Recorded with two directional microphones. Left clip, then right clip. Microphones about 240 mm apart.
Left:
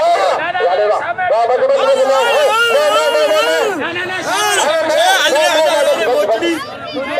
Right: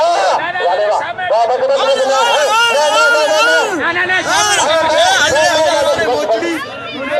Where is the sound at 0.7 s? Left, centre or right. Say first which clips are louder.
Even; left.